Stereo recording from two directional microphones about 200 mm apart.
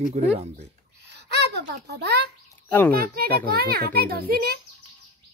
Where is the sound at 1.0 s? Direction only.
55° right (ahead or behind).